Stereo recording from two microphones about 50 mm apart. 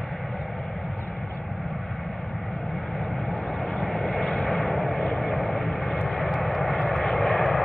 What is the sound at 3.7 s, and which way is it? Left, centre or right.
Vehicle, centre.